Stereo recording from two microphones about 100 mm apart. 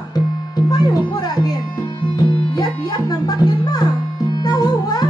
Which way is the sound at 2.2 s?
40° left (ahead or behind).